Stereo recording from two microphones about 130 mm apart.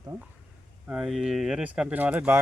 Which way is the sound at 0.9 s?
5° right (ahead or behind).